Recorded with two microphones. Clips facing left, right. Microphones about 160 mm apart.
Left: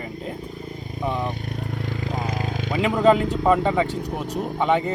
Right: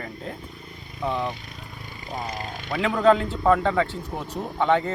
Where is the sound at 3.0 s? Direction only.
20° left (ahead or behind).